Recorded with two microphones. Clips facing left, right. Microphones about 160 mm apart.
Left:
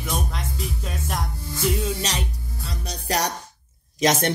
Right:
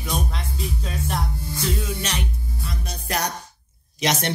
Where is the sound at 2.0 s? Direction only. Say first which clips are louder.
Even; 35° left (ahead or behind).